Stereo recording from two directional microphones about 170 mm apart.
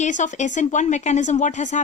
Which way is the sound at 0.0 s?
45° left (ahead or behind).